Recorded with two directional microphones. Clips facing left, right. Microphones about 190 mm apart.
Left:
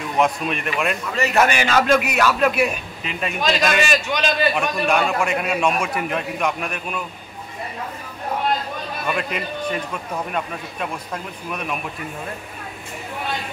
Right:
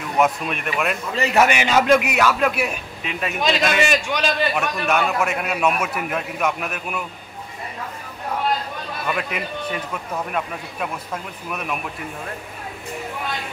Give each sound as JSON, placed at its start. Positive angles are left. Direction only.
{"t": 0.2, "sound": "a man's voice", "side_deg": 0}
{"t": 1.1, "sound": "a man's voice", "side_deg": -30}
{"t": 1.5, "sound": "a man's voice", "side_deg": -15}
{"t": 9.1, "sound": "a man's voice", "side_deg": -5}
{"t": 11.5, "sound": "a man's voice", "side_deg": -5}